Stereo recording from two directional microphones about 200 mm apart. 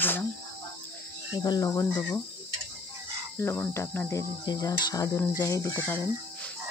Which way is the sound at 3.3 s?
10° left (ahead or behind).